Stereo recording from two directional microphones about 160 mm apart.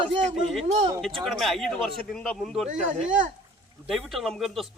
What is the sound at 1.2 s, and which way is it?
A man's voice, centre (ahead or behind).